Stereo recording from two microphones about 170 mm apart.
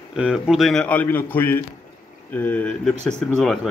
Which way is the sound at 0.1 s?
5° right (ahead or behind).